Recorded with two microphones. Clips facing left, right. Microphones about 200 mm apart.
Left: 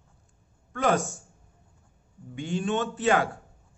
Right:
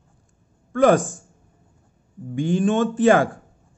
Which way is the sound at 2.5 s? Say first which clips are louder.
Right 8 dB; 45° right (ahead or behind).